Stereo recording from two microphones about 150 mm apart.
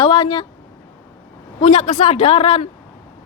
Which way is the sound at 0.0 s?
35° left (ahead or behind).